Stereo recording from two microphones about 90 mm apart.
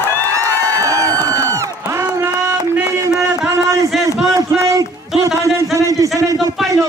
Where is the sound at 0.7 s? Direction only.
35° right (ahead or behind).